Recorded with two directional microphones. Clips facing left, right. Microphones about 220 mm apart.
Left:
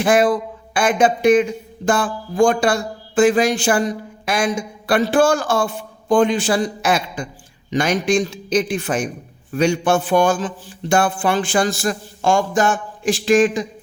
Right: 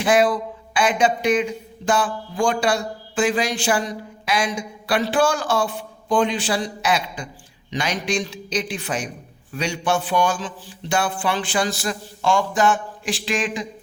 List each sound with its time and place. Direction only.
0.0 s a man's voice: 50° left (ahead or behind)